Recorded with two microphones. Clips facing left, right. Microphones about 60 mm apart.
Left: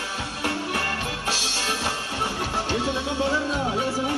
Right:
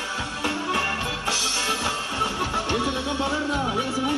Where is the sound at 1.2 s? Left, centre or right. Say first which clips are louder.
Left 1 dB; right.